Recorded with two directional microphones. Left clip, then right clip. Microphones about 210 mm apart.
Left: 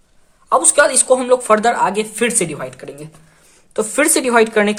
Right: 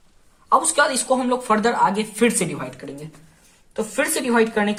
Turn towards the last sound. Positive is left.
turn(degrees=45)  # may be behind; listen again after turning